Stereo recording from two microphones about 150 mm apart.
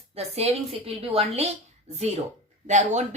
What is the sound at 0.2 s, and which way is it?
A woman's voice, 45° right (ahead or behind).